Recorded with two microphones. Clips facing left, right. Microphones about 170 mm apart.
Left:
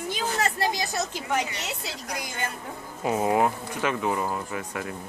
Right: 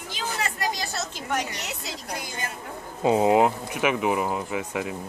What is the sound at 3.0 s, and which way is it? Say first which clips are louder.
Speech: right 4 dB; 20° right (ahead or behind).